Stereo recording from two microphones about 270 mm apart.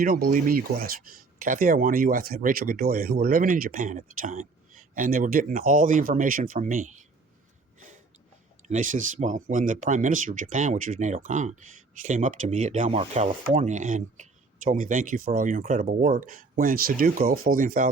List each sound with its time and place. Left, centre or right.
0.0 s speech: right
7.8 s a sound: right
8.6 s speech: right